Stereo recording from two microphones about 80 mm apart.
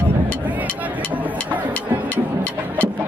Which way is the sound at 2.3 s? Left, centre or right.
Right.